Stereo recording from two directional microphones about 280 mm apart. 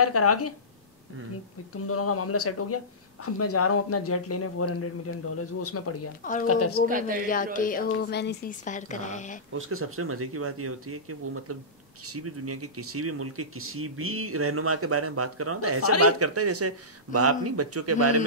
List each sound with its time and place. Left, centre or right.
0.0 s speech: left
1.9 s speech: left
6.9 s speech: right
7.5 s speech: left
9.5 s speech: right